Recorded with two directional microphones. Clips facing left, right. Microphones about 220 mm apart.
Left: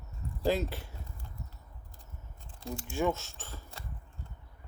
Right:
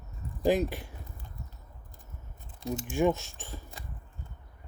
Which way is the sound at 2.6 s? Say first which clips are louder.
Right 5 dB; 20° right (ahead or behind).